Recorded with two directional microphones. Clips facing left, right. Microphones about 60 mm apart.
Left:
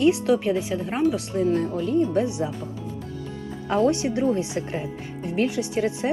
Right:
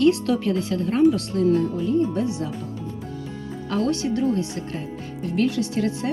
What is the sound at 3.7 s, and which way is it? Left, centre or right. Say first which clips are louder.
Speech: left 2 dB; left.